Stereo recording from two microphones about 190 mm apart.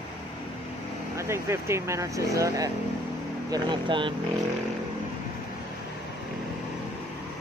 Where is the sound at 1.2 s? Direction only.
15° right (ahead or behind).